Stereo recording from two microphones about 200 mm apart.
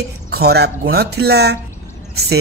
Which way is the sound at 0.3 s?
50° right (ahead or behind).